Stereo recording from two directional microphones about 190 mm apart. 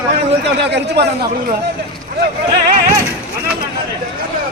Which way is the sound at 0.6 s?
60° right (ahead or behind).